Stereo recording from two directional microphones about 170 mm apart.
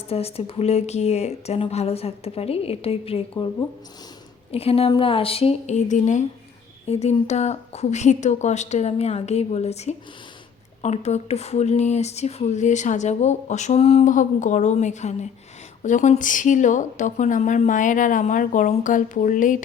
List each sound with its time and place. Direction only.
0.1 s speech: 35° left (ahead or behind)
3.3 s speech: 20° left (ahead or behind)
4.5 s a woman's voice: 35° left (ahead or behind); by 19.6 s 50° left (ahead or behind)